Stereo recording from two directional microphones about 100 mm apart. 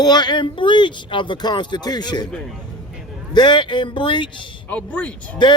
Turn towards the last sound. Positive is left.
turn(degrees=15)  # may be behind; listen again after turning